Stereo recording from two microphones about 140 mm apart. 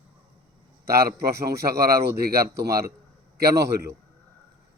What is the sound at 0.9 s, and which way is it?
A man's voice, 90° right.